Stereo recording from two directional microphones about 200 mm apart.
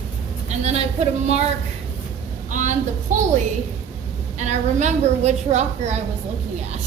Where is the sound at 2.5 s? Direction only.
40° right (ahead or behind).